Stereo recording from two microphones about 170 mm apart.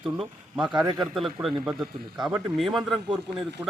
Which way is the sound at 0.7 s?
25° right (ahead or behind).